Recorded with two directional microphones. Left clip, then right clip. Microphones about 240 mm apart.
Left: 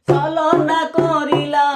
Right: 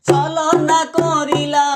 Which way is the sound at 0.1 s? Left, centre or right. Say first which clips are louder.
Right 1 dB; right.